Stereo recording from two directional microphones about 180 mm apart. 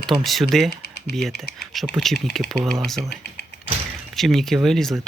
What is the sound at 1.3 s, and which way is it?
Speech, 65° left (ahead or behind).